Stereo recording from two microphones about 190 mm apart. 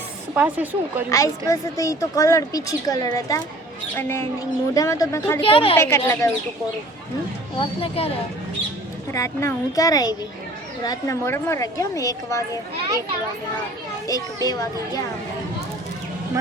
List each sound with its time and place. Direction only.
0.3 s speech: 10° right (ahead or behind)
1.1 s a woman's voice: 15° left (ahead or behind)
5.4 s speech: 30° left (ahead or behind)
5.7 s a woman's voice: 15° left (ahead or behind)
7.6 s speech: 30° left (ahead or behind)
9.1 s a woman's voice: 15° left (ahead or behind)
14.1 s speech: 20° left (ahead or behind)